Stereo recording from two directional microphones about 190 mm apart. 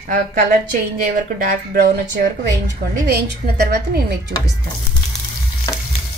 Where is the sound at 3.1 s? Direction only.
55° right (ahead or behind).